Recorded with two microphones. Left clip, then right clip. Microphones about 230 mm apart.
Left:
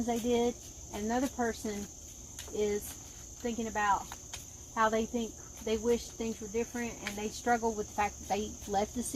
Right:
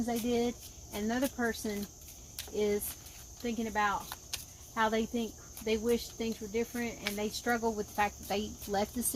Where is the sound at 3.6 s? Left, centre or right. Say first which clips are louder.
Left 2 dB; right.